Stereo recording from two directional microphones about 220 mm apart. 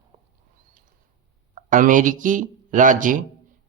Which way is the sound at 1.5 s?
35° right (ahead or behind).